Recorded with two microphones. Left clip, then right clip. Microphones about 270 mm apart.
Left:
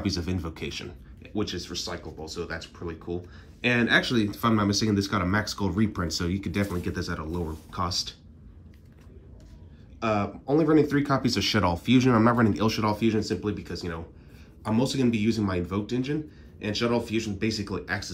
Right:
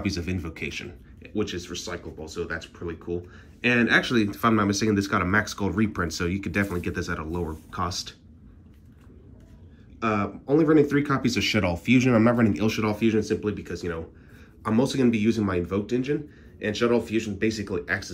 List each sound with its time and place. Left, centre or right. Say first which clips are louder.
0.0 s speech: even; centre
9.9 s speech: right 1 dB; centre